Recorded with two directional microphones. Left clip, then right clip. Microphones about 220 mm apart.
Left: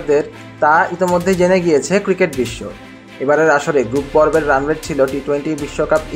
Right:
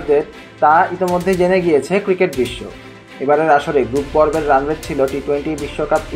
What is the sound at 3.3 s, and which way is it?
Speech, 25° left (ahead or behind).